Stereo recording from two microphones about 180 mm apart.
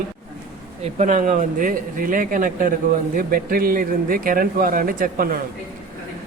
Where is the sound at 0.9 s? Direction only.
40° right (ahead or behind).